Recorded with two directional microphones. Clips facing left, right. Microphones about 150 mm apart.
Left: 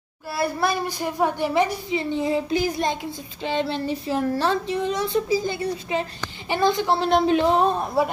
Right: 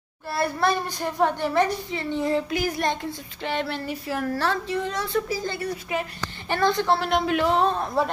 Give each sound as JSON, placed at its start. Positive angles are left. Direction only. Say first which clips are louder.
{"t": 0.4, "sound": "a child's voice", "louder": "even", "side_deg": 10}
{"t": 7.1, "sound": "a child's voice", "louder": "left 4 dB", "side_deg": 30}